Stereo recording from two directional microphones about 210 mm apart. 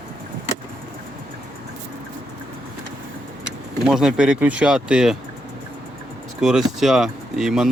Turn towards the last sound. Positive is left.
turn(degrees=0)  # may be behind; listen again after turning